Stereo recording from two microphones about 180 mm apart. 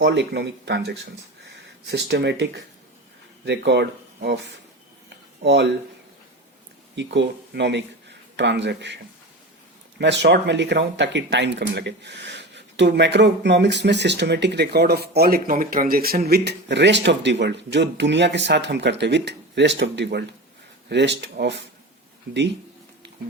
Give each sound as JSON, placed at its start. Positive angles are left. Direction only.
{"t": 0.0, "sound": "speech", "side_deg": -75}
{"t": 5.0, "sound": "a sound", "side_deg": -75}
{"t": 6.9, "sound": "speech", "side_deg": -80}
{"t": 10.0, "sound": "speech", "side_deg": -75}